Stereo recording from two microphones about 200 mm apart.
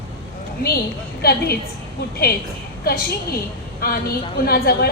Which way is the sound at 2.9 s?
50° left (ahead or behind).